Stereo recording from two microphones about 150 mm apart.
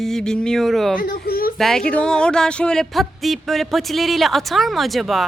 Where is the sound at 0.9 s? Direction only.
85° left.